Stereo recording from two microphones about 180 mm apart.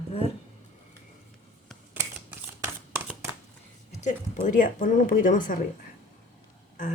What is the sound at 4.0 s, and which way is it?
Speech, 45° left (ahead or behind).